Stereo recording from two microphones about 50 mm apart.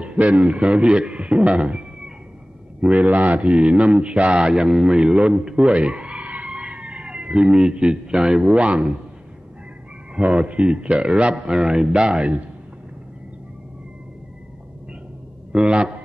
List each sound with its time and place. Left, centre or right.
0.0 s speech: right
2.8 s speech: right
10.1 s speech: right
15.5 s speech: centre